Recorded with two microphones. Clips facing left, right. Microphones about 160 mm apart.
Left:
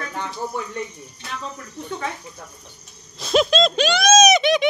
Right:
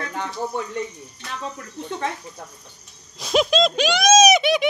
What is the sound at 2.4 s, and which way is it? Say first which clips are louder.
Speech: right 1 dB; 15° right (ahead or behind).